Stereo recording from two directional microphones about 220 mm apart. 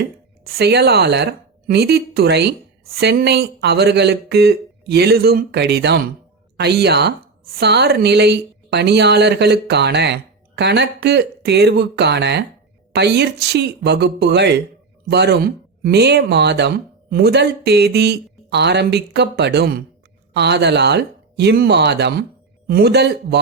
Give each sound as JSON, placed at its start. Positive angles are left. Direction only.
{"t": 0.0, "sound": "speech", "side_deg": -45}